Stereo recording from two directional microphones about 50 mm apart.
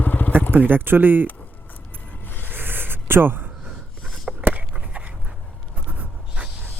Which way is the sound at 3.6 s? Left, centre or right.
Centre.